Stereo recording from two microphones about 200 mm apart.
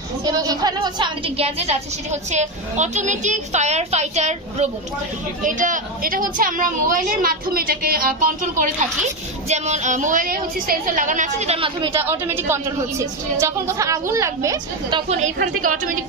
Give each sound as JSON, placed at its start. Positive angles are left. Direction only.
{"t": 0.2, "sound": "a woman's voice", "side_deg": -20}
{"t": 11.9, "sound": "a woman's voice", "side_deg": -10}